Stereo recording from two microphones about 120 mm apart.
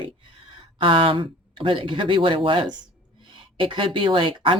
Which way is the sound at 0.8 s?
45° right (ahead or behind).